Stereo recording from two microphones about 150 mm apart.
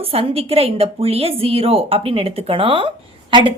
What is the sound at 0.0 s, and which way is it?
A woman's voice, 40° right (ahead or behind).